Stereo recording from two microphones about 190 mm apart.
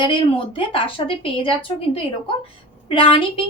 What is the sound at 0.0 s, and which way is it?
A woman's voice, 25° left (ahead or behind).